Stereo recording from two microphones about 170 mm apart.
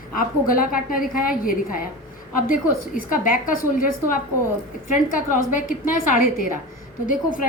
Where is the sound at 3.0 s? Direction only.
55° left (ahead or behind).